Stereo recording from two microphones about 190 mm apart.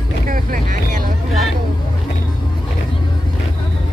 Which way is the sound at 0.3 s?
45° right (ahead or behind).